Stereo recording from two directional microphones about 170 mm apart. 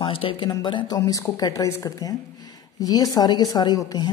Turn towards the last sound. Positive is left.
turn(degrees=25)  # may be behind; listen again after turning